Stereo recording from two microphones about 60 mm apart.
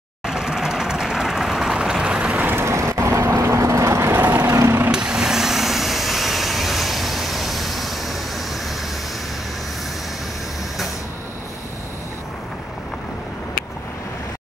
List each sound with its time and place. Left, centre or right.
0.3 s vehicle: centre
2.4 s vehicle: right
4.4 s vehicle: right
4.9 s vehicle: centre